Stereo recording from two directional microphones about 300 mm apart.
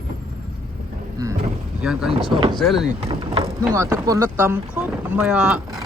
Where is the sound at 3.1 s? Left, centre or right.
Centre.